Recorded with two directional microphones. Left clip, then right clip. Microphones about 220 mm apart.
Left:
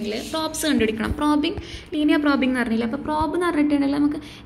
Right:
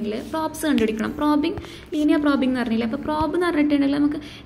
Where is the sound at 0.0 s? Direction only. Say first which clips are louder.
Even; 15° right (ahead or behind).